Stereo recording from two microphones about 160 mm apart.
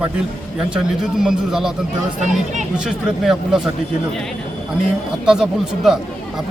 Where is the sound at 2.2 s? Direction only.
50° right (ahead or behind).